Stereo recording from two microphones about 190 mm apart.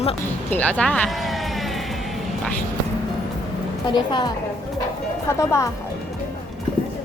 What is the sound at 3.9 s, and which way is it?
Speech, 25° left (ahead or behind).